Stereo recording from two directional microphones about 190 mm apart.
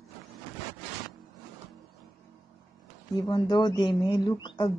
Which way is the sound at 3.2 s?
25° left (ahead or behind).